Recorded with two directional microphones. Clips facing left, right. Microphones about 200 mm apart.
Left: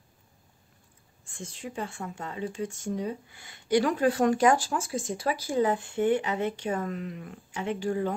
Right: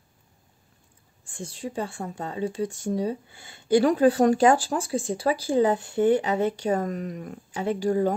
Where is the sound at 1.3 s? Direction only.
35° right (ahead or behind).